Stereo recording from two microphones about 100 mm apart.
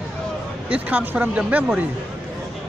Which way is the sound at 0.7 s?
15° right (ahead or behind).